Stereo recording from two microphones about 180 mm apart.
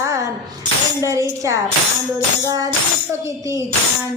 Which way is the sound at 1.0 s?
15° right (ahead or behind).